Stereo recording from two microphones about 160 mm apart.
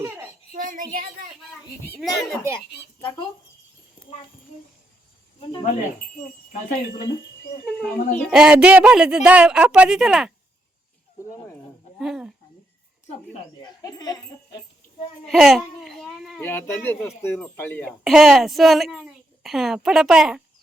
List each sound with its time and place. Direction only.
0.0 s a sound: 15° right (ahead or behind)
0.5 s a woman's voice: 55° right (ahead or behind)
2.0 s a woman's voice: centre (ahead or behind)
5.4 s speech: 30° left (ahead or behind)
7.6 s speech: 10° left (ahead or behind)
8.3 s a woman's voice: 5° right (ahead or behind)
11.9 s a woman's voice: 5° right (ahead or behind)
13.1 s speech: 40° left (ahead or behind)
13.6 s speech: 25° left (ahead or behind)
15.3 s a woman's voice: centre (ahead or behind)
16.4 s speech: 15° left (ahead or behind)
18.0 s a woman's voice: centre (ahead or behind)